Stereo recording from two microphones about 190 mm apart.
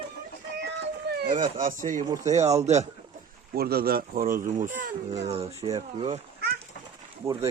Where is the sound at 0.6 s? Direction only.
65° right (ahead or behind).